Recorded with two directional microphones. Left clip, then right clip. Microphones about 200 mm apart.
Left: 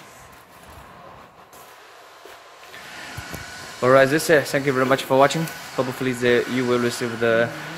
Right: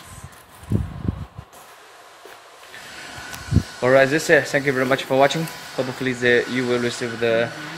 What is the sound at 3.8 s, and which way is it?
Speech, 10° left (ahead or behind).